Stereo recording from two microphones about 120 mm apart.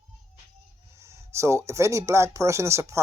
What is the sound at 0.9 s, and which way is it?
Speech, 25° right (ahead or behind).